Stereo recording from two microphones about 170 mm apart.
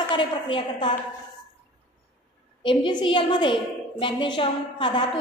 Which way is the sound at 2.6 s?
25° left (ahead or behind).